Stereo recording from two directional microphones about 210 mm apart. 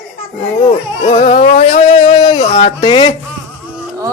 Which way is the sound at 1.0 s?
25° left (ahead or behind).